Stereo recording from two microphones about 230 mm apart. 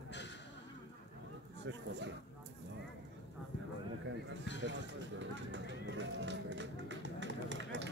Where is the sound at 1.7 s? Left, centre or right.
Right.